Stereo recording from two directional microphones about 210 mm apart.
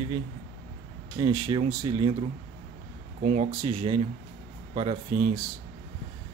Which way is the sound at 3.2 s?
35° right (ahead or behind).